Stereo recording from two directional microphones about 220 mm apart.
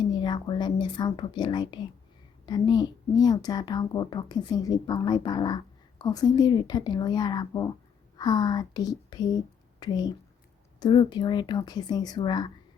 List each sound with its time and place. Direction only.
0.1 s a woman's voice: 20° left (ahead or behind)